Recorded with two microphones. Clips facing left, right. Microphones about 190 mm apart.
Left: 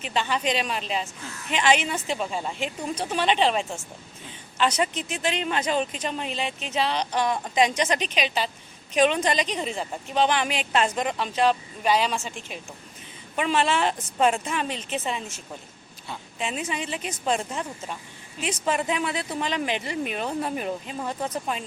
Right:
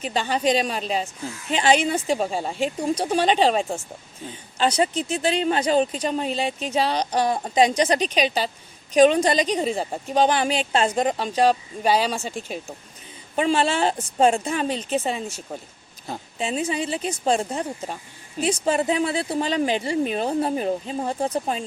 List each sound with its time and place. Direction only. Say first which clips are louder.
0.0 s speech: right 4 dB; 35° right (ahead or behind)